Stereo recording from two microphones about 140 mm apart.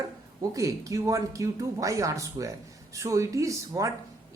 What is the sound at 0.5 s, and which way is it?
A woman's voice, 20° right (ahead or behind).